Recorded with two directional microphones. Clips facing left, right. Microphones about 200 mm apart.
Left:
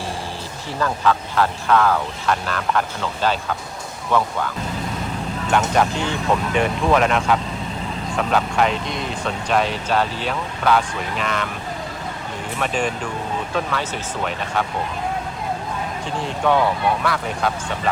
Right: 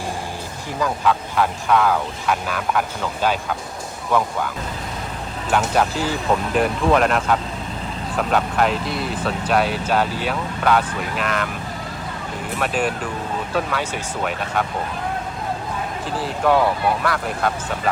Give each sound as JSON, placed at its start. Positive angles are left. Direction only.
{"t": 0.8, "sound": "speech", "side_deg": -5}
{"t": 12.5, "sound": "speech", "side_deg": -5}
{"t": 16.2, "sound": "speech", "side_deg": -5}